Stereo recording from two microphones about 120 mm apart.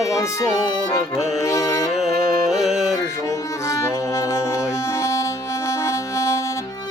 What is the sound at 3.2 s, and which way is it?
Music, 25° left (ahead or behind).